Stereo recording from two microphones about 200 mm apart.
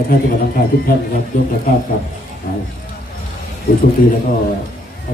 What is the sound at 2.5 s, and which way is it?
Speech, 45° left (ahead or behind).